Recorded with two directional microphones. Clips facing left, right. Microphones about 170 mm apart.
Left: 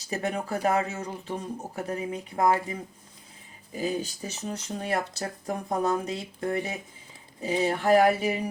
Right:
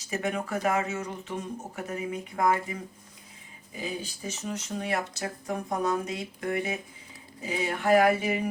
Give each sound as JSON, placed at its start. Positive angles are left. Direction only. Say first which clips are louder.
{"t": 0.1, "sound": "speech", "louder": "left 1 dB", "side_deg": 35}
{"t": 3.8, "sound": "speech", "louder": "left 6 dB", "side_deg": 40}